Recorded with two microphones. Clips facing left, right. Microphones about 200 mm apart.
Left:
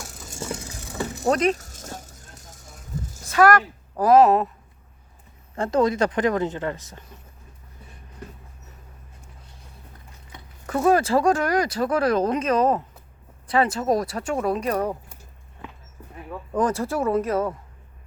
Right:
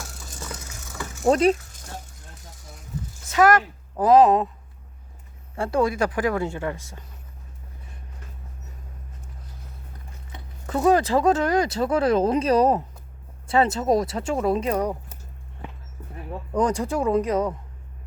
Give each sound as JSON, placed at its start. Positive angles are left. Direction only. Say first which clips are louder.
{"t": 0.3, "sound": "vehicle", "louder": "left 8 dB", "side_deg": 25}
{"t": 1.3, "sound": "speech", "louder": "right 3 dB", "side_deg": -30}
{"t": 1.5, "sound": "a sound", "louder": "left 5 dB", "side_deg": 45}
{"t": 3.2, "sound": "speech", "louder": "left 1 dB", "side_deg": -20}
{"t": 5.5, "sound": "speech", "louder": "left 2 dB", "side_deg": -10}
{"t": 10.8, "sound": "speech", "louder": "even", "side_deg": -20}
{"t": 16.6, "sound": "speech", "louder": "even", "side_deg": -15}